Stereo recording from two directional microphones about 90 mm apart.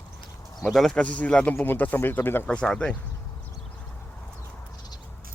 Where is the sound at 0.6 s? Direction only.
5° left (ahead or behind).